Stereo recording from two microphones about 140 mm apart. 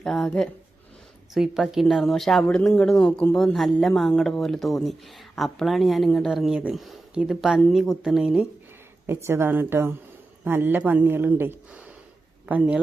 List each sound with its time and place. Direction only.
0.0 s a woman's voice: 5° left (ahead or behind)
9.0 s speech: 20° right (ahead or behind)